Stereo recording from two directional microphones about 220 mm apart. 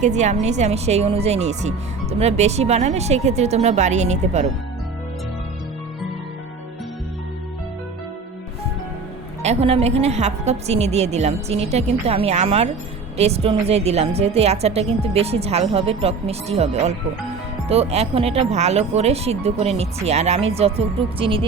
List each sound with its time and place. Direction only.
0.0 s speech: 30° right (ahead or behind)
9.4 s speech: 30° right (ahead or behind)